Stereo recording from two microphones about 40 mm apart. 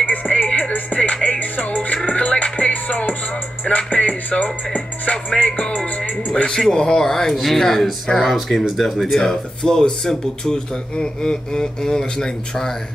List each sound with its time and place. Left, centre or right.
0.0 s music: left
1.1 s music: left
1.4 s music: left
6.7 s speech: left
7.0 s speech: centre